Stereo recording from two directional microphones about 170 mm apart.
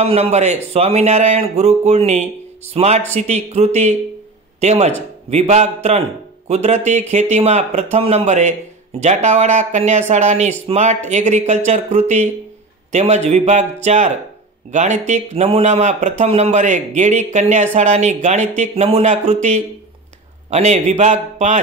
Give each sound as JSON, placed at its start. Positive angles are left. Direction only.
{"t": 0.0, "sound": "speech", "side_deg": -35}